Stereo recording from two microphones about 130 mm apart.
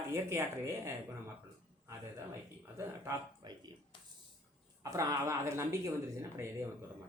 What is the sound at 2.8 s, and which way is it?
Speech, 20° right (ahead or behind).